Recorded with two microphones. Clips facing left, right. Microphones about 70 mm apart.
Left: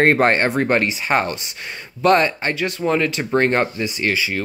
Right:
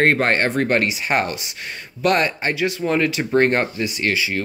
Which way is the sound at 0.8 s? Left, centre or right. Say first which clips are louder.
Left 1 dB; centre.